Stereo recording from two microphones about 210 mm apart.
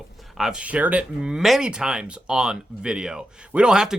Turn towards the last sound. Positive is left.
turn(degrees=-5)  # may be behind; listen again after turning